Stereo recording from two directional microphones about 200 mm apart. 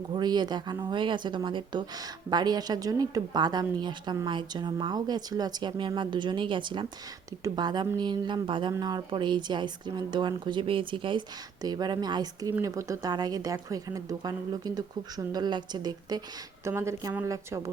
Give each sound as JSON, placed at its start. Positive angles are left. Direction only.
{"t": 0.1, "sound": "a woman's voice", "side_deg": -20}